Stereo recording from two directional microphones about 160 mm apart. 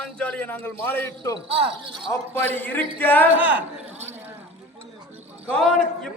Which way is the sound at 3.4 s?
10° right (ahead or behind).